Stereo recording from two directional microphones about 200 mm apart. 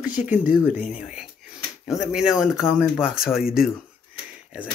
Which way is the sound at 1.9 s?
5° right (ahead or behind).